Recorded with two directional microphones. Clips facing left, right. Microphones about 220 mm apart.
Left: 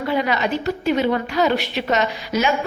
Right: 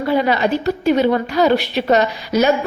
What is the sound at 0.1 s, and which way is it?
A woman's voice, 35° right (ahead or behind).